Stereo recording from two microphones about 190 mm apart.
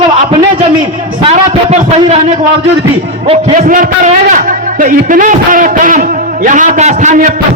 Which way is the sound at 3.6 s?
45° right (ahead or behind).